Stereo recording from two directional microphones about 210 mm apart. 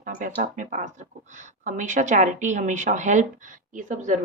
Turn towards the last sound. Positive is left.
turn(degrees=-35)  # may be behind; listen again after turning